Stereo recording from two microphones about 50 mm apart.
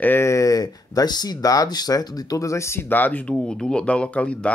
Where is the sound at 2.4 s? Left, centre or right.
Left.